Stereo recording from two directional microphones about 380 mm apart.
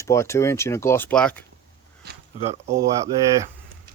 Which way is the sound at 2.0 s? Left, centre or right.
Right.